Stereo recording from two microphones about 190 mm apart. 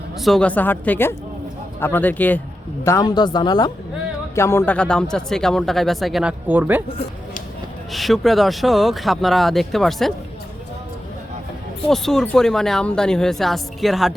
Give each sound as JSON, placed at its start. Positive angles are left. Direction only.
{"t": 0.2, "sound": "a woman's voice", "side_deg": 0}
{"t": 7.9, "sound": "speech", "side_deg": 0}
{"t": 11.9, "sound": "speech", "side_deg": 0}